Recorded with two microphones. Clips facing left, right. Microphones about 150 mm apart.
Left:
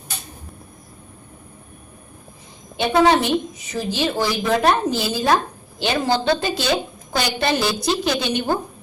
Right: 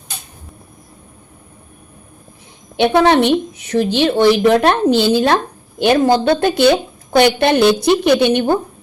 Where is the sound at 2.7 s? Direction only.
70° right (ahead or behind).